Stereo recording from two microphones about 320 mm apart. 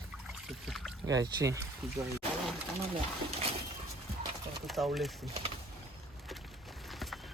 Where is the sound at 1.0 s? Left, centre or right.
Centre.